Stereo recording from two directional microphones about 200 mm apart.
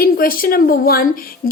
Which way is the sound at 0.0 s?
45° left (ahead or behind).